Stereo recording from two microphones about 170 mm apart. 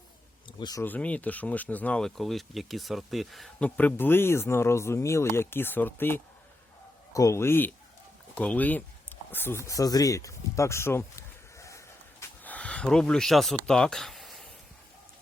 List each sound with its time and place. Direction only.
0.6 s speech: 20° left (ahead or behind)
0.9 s speech: 10° left (ahead or behind)